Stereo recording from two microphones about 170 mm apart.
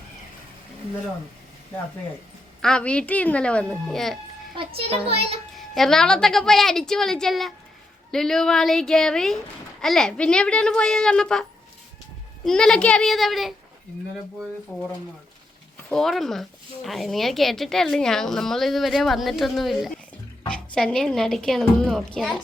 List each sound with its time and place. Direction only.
2.6 s speech: 5° left (ahead or behind)
4.5 s a child's voice: 35° right (ahead or behind)
5.5 s speech: centre (ahead or behind)
12.5 s speech: 5° left (ahead or behind)
14.7 s speech: 5° left (ahead or behind)
15.9 s speech: centre (ahead or behind)